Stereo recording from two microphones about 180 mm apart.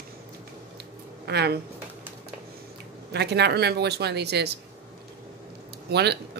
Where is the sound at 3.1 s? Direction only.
65° right (ahead or behind).